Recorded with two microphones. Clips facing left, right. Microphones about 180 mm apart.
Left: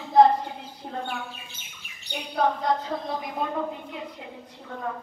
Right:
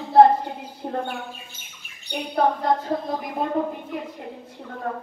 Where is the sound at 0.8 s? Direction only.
50° right (ahead or behind).